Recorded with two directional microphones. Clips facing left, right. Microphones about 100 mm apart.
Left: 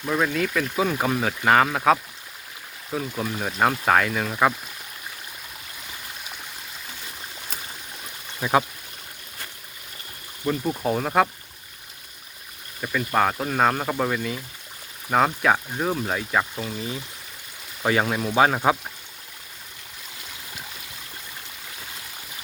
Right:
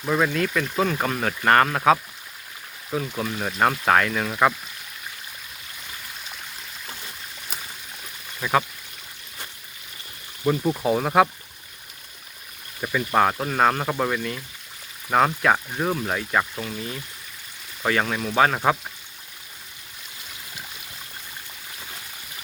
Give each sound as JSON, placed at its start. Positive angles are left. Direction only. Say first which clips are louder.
{"t": 0.0, "sound": "speech", "louder": "right 1 dB", "side_deg": -5}
{"t": 8.4, "sound": "speech", "louder": "left 1 dB", "side_deg": 15}
{"t": 10.4, "sound": "speech", "louder": "right 3 dB", "side_deg": -5}
{"t": 12.8, "sound": "speech", "louder": "right 2 dB", "side_deg": -10}